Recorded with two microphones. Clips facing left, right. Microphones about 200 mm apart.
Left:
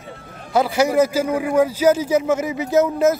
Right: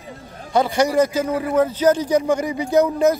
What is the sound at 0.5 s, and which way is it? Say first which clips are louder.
Speech: even; 5° left (ahead or behind).